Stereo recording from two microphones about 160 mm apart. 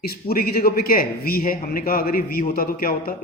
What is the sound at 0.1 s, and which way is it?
A man's voice, 70° left (ahead or behind).